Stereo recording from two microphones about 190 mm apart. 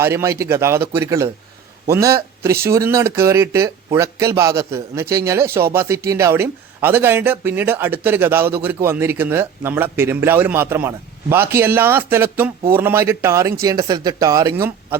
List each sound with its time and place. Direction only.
0.0 s a man's voice: 15° right (ahead or behind)